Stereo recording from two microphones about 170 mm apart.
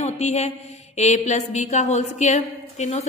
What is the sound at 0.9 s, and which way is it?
A woman's voice, 40° left (ahead or behind).